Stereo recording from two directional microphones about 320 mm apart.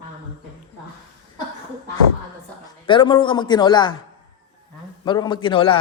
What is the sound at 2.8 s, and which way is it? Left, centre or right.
A man's voice, centre.